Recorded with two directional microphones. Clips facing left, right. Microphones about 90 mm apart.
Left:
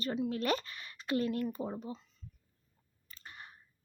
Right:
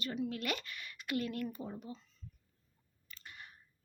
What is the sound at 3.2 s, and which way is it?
Clicking, 35° left (ahead or behind).